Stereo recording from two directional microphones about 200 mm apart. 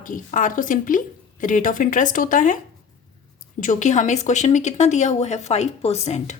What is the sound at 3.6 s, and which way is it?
A woman's voice, 40° left (ahead or behind).